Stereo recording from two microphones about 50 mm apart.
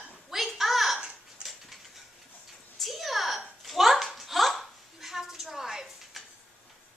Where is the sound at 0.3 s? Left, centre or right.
Centre.